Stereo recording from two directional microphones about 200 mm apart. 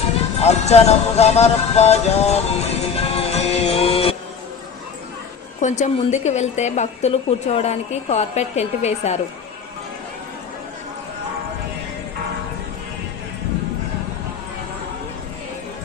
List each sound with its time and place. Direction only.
0.3 s music: 35° left (ahead or behind)
5.5 s a woman's voice: 35° left (ahead or behind)